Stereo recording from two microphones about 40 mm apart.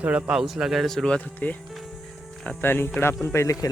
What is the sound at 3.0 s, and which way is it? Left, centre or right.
Speech, left.